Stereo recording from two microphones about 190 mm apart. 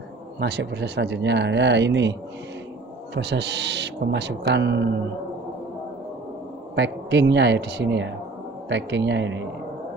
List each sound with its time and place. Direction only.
0.4 s speech: 65° right (ahead or behind)
3.2 s speech: 65° right (ahead or behind)
6.7 s speech: 65° right (ahead or behind)